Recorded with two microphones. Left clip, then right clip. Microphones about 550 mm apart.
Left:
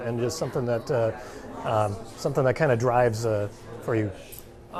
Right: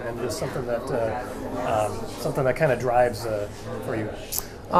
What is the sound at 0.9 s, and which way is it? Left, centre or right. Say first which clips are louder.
Speech: even; left.